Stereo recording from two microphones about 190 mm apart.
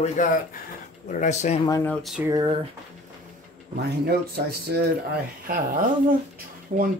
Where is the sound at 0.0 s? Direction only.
45° left (ahead or behind).